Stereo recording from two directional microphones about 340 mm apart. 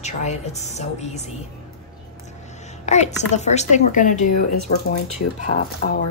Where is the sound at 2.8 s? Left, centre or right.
Centre.